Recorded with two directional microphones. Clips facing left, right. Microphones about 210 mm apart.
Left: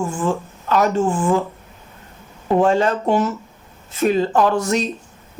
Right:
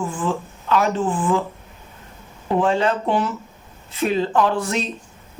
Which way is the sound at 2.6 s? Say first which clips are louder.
Left 2 dB; 45° left (ahead or behind).